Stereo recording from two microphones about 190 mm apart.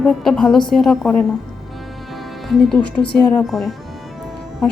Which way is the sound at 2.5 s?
Centre (ahead or behind).